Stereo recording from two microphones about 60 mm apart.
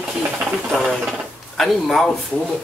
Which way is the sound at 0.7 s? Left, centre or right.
Centre.